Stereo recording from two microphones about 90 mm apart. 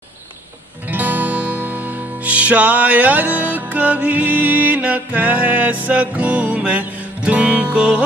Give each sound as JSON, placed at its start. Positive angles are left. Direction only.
{"t": 0.8, "sound": "music", "side_deg": -20}